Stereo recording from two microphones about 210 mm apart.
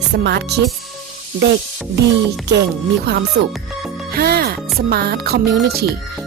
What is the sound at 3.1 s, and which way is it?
Speech, 50° right (ahead or behind).